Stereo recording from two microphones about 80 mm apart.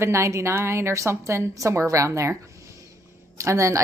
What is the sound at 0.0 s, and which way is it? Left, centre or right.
A woman's voice, right.